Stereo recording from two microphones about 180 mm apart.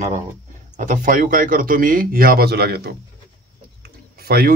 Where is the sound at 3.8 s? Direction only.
60° right (ahead or behind).